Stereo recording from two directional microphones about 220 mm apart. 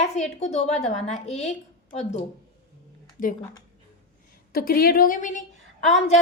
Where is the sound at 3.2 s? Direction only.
40° left (ahead or behind).